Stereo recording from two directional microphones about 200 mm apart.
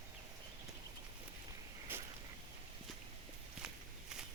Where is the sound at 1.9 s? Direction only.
10° right (ahead or behind).